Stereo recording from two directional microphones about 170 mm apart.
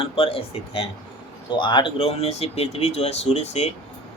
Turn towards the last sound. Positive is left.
turn(degrees=40)  # may be behind; listen again after turning